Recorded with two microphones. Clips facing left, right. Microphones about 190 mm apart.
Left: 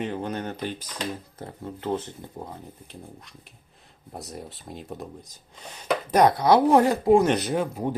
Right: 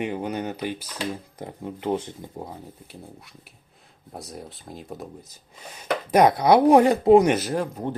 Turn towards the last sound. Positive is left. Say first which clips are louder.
# left 1 dB
turn(degrees=10)  # may be behind; listen again after turning